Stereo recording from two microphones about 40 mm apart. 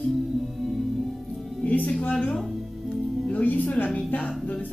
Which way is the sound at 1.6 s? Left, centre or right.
Left.